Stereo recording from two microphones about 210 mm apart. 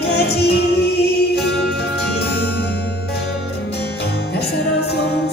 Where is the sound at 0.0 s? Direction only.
50° left (ahead or behind).